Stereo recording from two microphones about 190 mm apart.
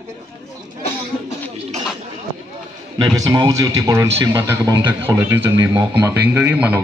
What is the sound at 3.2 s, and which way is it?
A man's voice, 20° right (ahead or behind).